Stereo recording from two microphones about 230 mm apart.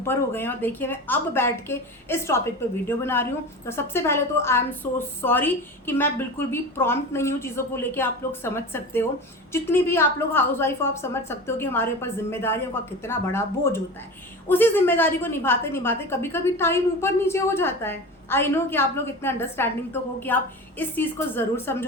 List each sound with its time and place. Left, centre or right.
0.0 s a woman's voice: centre